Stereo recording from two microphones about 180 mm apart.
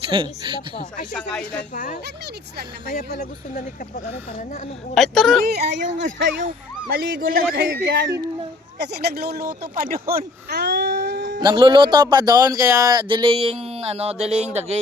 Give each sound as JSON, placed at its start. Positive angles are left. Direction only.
{"t": 0.1, "sound": "speech", "side_deg": -30}
{"t": 1.1, "sound": "speech", "side_deg": 5}
{"t": 1.7, "sound": "speech", "side_deg": 45}
{"t": 4.9, "sound": "speech", "side_deg": 0}
{"t": 5.4, "sound": "speech", "side_deg": -65}
{"t": 6.4, "sound": "speech", "side_deg": -55}
{"t": 7.5, "sound": "speech", "side_deg": -70}
{"t": 11.3, "sound": "speech", "side_deg": -25}